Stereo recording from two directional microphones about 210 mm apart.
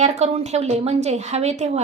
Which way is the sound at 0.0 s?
30° right (ahead or behind).